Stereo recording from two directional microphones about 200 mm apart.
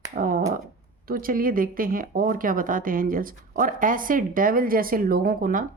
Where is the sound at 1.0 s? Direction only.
45° right (ahead or behind).